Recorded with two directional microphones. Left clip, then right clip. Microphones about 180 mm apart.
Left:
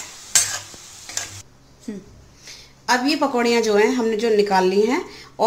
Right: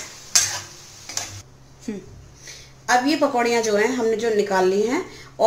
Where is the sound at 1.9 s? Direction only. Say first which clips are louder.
Right 2 dB; centre (ahead or behind).